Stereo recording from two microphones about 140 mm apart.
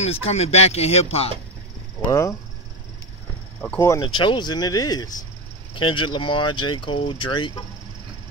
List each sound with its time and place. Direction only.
0.0 s speech: 45° left (ahead or behind)
2.0 s speech: 20° left (ahead or behind)
4.0 s speech: 35° left (ahead or behind)